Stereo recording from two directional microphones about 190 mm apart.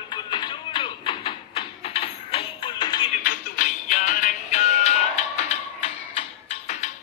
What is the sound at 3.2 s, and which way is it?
Music, 45° left (ahead or behind).